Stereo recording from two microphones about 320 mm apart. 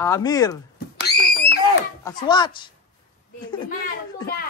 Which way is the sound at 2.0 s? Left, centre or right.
Centre.